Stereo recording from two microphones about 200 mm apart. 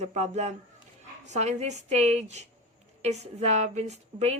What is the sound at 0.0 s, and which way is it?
A woman's voice, 35° right (ahead or behind).